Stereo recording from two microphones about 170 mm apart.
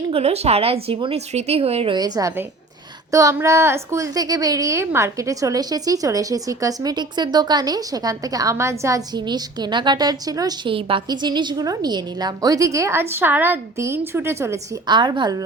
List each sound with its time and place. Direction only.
0.1 s speech: 35° right (ahead or behind)
2.0 s a woman's voice: 20° right (ahead or behind)
14.9 s a woman's voice: 25° right (ahead or behind)